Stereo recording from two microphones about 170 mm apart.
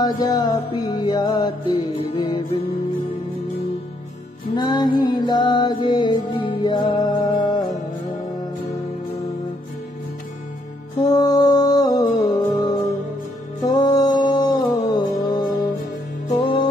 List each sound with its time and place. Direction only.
0.0 s music: 20° left (ahead or behind)
4.6 s music: 25° left (ahead or behind)
11.1 s music: 20° left (ahead or behind)